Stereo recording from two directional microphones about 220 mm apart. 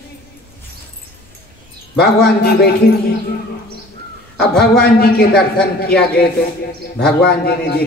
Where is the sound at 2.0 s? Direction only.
45° left (ahead or behind).